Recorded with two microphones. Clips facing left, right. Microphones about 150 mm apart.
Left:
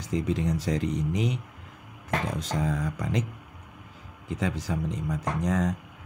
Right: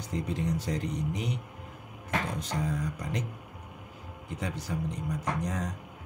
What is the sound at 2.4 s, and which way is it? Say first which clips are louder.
Speech: left 3 dB; 90° left.